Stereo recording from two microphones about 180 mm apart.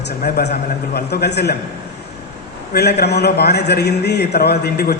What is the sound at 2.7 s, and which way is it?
A man's voice, 65° left (ahead or behind).